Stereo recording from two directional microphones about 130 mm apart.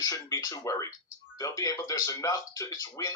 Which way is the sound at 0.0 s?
30° left (ahead or behind).